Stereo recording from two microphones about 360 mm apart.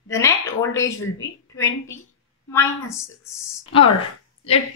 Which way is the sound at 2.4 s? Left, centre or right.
Centre.